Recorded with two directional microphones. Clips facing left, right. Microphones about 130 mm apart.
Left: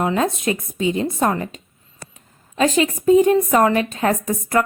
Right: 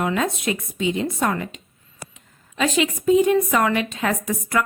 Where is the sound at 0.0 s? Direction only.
35° left (ahead or behind).